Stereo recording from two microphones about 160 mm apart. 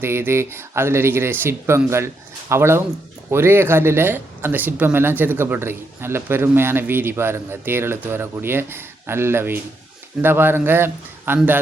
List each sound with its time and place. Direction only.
0.0 s speech: 15° right (ahead or behind)